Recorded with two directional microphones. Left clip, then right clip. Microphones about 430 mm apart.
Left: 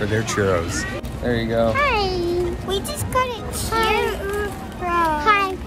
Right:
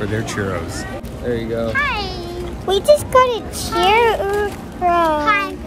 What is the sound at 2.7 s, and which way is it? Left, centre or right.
A child's voice, centre.